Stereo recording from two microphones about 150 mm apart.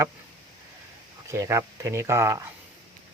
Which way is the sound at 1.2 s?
20° right (ahead or behind).